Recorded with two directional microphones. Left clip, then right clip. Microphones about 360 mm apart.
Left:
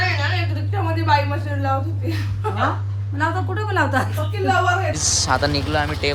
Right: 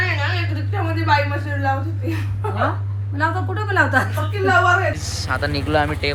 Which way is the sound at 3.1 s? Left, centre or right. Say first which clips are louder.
Right 1 dB; centre.